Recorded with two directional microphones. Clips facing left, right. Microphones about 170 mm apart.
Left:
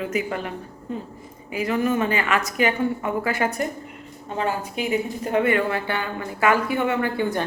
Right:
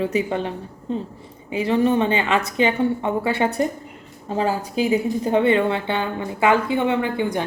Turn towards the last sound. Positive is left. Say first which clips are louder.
# right 1 dB
turn(degrees=-15)  # may be behind; listen again after turning